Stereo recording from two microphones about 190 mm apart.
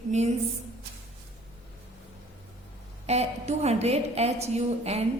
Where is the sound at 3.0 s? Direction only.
35° right (ahead or behind).